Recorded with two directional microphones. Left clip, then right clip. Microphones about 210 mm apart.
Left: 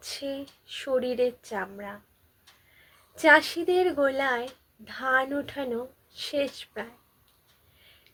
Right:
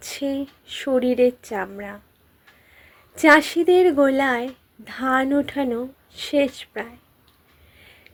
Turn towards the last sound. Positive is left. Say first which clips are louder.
# right 8 dB
turn(degrees=-40)  # may be behind; listen again after turning